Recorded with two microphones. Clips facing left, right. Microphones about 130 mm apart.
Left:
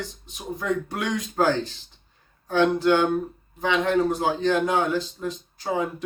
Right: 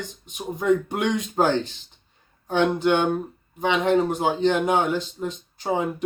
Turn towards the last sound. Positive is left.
turn(degrees=-20)  # may be behind; listen again after turning